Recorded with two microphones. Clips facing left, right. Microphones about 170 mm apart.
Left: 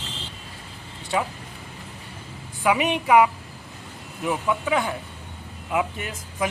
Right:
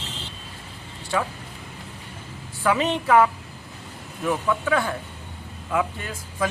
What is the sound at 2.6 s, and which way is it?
Speech, 15° left (ahead or behind).